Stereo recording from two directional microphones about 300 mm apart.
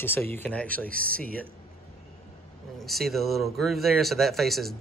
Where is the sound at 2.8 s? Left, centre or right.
Centre.